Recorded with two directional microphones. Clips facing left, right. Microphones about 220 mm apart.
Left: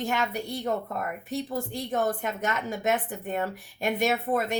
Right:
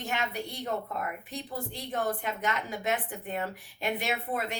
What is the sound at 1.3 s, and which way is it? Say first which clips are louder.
A woman's voice: left 7 dB; 45° left (ahead or behind).